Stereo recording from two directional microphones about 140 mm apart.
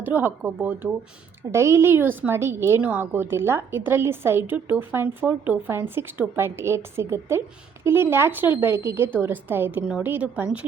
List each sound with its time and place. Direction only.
0.0 s a woman's voice: 15° right (ahead or behind)